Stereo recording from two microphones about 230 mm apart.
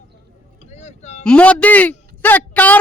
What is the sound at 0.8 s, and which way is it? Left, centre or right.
Vehicle, left.